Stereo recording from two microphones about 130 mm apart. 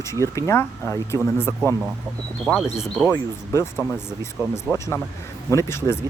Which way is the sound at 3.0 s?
20° left (ahead or behind).